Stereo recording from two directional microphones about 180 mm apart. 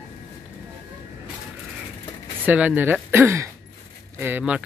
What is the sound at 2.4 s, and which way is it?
Speech, 10° right (ahead or behind).